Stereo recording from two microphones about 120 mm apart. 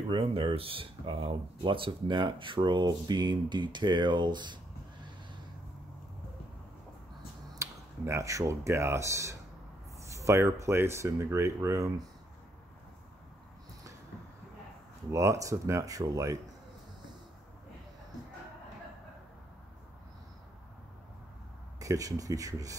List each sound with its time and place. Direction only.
0.1 s speech: 50° right (ahead or behind)
7.5 s speech: 25° right (ahead or behind)
15.0 s speech: 25° right (ahead or behind)
21.7 s speech: 30° right (ahead or behind)